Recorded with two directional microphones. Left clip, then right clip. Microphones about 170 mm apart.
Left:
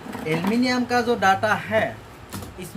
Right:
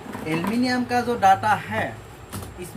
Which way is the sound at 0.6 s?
35° left (ahead or behind).